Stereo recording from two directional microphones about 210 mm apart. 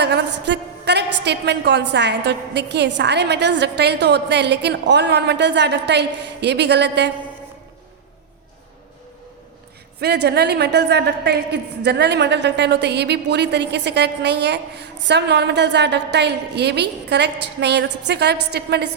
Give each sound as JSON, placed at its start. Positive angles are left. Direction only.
{"t": 0.0, "sound": "a woman's voice", "side_deg": -55}
{"t": 10.0, "sound": "a woman's voice", "side_deg": -50}